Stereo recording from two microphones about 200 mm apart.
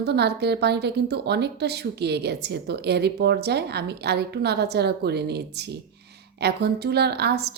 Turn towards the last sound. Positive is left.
turn(degrees=-55)  # may be behind; listen again after turning